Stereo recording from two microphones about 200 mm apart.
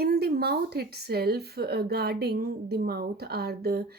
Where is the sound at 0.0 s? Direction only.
50° right (ahead or behind).